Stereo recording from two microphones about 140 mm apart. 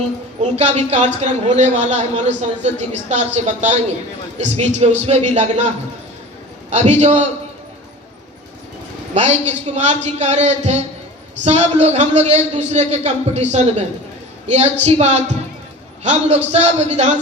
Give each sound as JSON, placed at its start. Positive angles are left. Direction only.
{"t": 0.5, "sound": "a man's voice", "side_deg": -50}
{"t": 9.1, "sound": "a man's voice", "side_deg": -55}